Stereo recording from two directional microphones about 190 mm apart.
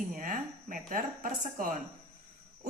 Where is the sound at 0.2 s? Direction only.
45° right (ahead or behind).